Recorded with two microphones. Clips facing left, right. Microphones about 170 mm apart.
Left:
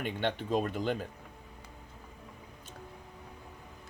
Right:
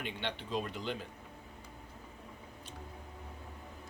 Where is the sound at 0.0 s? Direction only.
45° left (ahead or behind).